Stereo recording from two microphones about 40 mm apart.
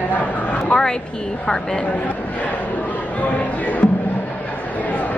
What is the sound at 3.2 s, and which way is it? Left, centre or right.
Speech, left.